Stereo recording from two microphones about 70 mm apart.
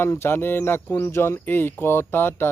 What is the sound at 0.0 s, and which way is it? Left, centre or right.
Speech, left.